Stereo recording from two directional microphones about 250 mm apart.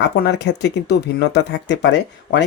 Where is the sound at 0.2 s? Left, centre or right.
Left.